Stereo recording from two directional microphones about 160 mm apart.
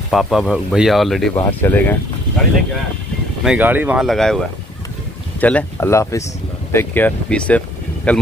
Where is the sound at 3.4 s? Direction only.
5° right (ahead or behind).